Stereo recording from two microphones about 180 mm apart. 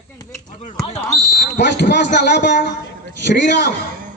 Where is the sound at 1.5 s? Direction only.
75° left (ahead or behind).